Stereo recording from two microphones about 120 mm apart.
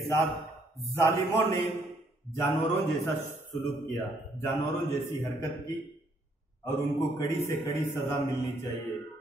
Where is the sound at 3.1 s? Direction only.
20° left (ahead or behind).